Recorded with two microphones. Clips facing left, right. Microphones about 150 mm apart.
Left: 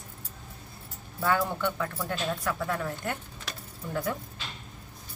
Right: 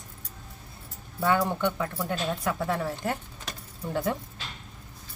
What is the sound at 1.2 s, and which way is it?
Speech, 20° right (ahead or behind).